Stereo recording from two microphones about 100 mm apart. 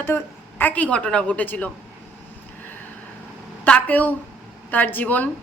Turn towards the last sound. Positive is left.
turn(degrees=15)  # may be behind; listen again after turning